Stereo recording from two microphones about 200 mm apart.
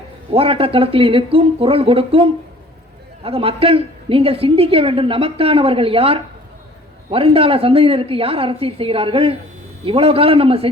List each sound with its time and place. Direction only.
0.3 s a woman's voice: 25° right (ahead or behind)